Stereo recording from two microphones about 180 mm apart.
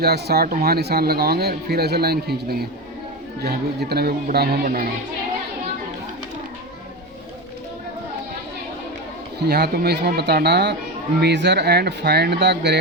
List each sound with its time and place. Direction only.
0.0 s speech: 60° right (ahead or behind)
9.5 s speech: 60° right (ahead or behind)